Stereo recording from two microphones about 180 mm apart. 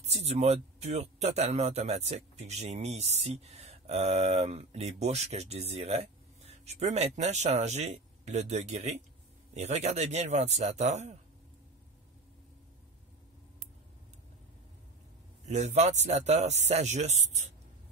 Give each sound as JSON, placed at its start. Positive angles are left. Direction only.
{"t": 0.0, "sound": "speech", "side_deg": -35}
{"t": 15.4, "sound": "speech", "side_deg": -40}